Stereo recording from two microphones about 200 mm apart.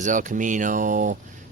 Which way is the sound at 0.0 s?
40° right (ahead or behind).